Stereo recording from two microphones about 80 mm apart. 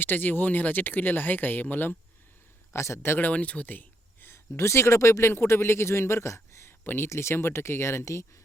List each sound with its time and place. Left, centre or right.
0.0 s speech: left
2.7 s speech: left